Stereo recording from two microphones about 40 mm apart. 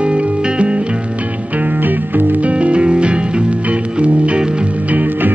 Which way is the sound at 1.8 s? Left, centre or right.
Right.